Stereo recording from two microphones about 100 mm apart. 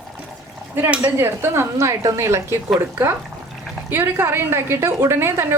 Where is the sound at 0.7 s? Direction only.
20° right (ahead or behind).